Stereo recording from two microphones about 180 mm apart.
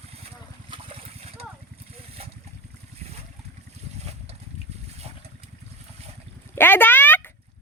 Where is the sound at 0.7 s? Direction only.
30° right (ahead or behind).